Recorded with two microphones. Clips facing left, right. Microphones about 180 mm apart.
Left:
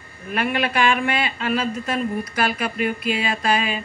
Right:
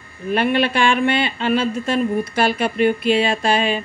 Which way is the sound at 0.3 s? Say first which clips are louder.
Right 5 dB; 30° right (ahead or behind).